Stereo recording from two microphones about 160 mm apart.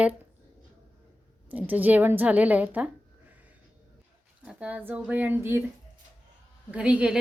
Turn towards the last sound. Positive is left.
turn(degrees=-5)  # may be behind; listen again after turning